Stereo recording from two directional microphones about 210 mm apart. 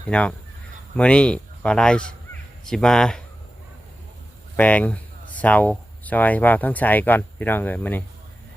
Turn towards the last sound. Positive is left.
turn(degrees=10)  # may be behind; listen again after turning